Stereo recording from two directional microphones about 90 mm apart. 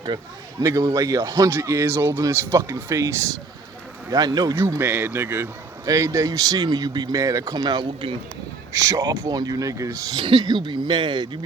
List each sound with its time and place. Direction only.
0.6 s speech: 35° right (ahead or behind)
1.5 s speech: 30° right (ahead or behind)
4.1 s speech: 50° right (ahead or behind)
4.8 s speech: 20° right (ahead or behind); by 7.2 s 50° right (ahead or behind)
7.2 s speech: 40° right (ahead or behind)
7.6 s speech: 55° right (ahead or behind)
8.7 s speech: 40° right (ahead or behind)
10.2 s speech: 70° right (ahead or behind)